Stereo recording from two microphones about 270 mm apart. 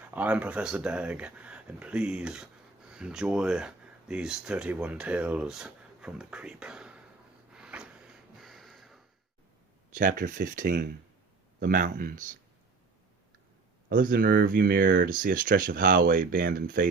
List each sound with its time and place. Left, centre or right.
0.1 s speech: centre
7.5 s snort: centre
9.9 s speech: right
13.9 s speech: right